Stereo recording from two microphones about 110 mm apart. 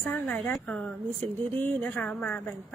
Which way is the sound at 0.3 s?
5° left (ahead or behind).